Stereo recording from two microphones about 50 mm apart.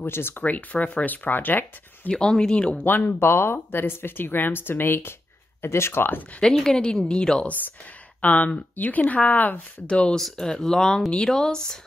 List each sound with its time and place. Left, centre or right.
0.0 s speech: left
0.4 s speech: left
2.0 s speech: centre
2.8 s speech: left
3.2 s speech: left
5.6 s speech: left
6.4 s speech: centre
8.2 s speech: left
9.8 s speech: left
10.1 s speech: centre